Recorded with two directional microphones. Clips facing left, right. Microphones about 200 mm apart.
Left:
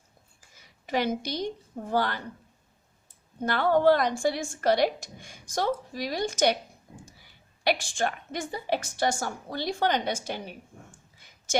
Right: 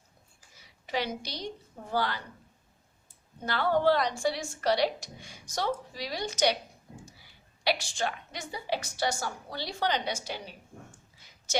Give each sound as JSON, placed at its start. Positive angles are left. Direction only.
{"t": 0.9, "sound": "speech", "side_deg": 50}
{"t": 3.4, "sound": "speech", "side_deg": 50}
{"t": 7.6, "sound": "speech", "side_deg": 50}